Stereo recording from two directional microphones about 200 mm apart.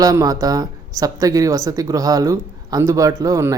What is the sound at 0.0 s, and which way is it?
A woman's voice, 20° right (ahead or behind).